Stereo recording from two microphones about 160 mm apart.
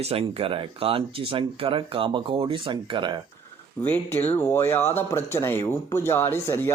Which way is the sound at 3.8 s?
10° left (ahead or behind).